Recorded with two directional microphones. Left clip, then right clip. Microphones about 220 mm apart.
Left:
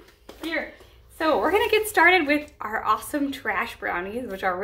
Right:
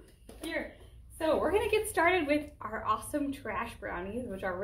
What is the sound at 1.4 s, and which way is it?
A woman's voice, 15° left (ahead or behind).